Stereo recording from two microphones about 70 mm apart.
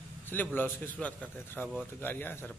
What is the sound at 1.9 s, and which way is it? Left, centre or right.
Speech, left.